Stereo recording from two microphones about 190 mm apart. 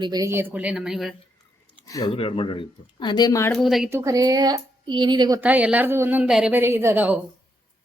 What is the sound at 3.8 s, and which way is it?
Speech, 15° right (ahead or behind).